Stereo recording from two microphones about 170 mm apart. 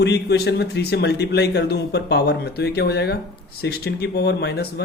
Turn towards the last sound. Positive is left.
turn(degrees=75)  # may be behind; listen again after turning